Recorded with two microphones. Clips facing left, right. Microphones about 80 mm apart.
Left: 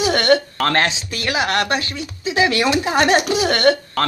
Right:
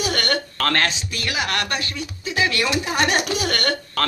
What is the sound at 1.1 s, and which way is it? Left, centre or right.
Speech, left.